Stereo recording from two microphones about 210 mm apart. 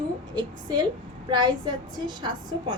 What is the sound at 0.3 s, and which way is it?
A woman's voice, 20° right (ahead or behind).